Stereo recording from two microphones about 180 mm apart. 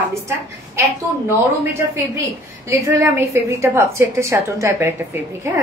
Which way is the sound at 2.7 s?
15° right (ahead or behind).